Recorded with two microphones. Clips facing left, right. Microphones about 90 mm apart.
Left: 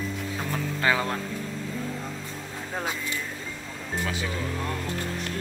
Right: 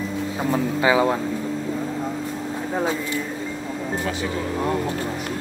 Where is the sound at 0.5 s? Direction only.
15° right (ahead or behind).